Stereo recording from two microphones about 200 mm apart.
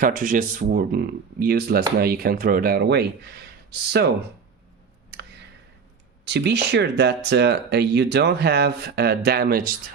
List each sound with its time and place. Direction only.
0.0 s speech: 40° right (ahead or behind)
6.2 s speech: 60° right (ahead or behind)